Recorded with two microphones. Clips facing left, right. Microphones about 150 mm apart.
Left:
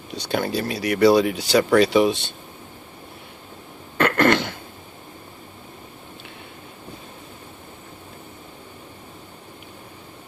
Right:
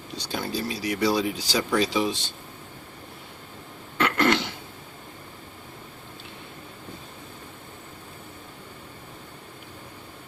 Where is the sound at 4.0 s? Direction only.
55° left (ahead or behind).